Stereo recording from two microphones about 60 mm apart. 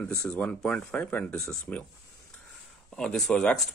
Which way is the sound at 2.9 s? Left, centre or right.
Centre.